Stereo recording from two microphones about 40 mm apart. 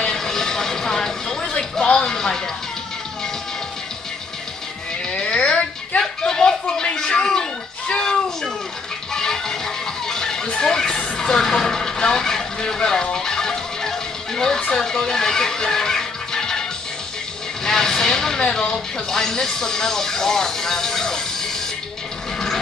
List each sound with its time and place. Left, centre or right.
0.0 s vehicle: centre
1.9 s music: left
5.1 s a sound: left
9.1 s music: centre
10.5 s a sound: centre
14.8 s music: centre
17.6 s speech: centre